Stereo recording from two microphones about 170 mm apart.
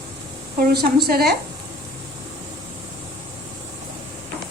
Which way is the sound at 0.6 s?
65° right (ahead or behind).